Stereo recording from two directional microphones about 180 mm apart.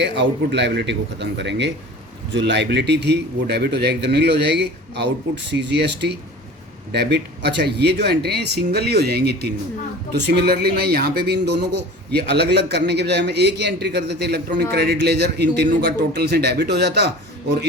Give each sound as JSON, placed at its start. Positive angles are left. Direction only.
{"t": 0.0, "sound": "speech", "side_deg": -75}